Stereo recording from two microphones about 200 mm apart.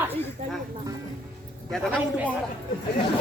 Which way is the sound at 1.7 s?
Centre (ahead or behind).